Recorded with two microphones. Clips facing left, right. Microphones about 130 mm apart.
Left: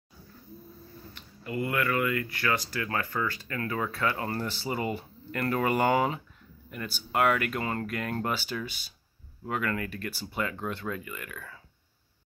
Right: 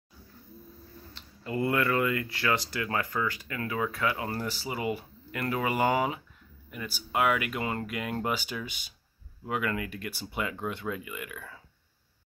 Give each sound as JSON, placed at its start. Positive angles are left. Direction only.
{"t": 1.1, "sound": "speech", "side_deg": -30}